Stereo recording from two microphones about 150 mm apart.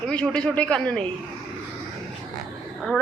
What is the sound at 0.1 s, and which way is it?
Speech, 5° left (ahead or behind).